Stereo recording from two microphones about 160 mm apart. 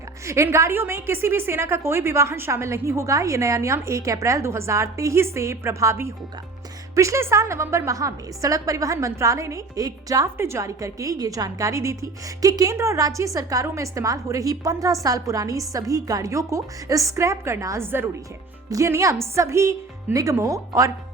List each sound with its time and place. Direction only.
0.3 s a woman's voice: 15° right (ahead or behind)